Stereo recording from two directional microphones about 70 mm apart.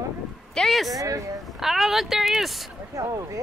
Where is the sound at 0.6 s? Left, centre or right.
Centre.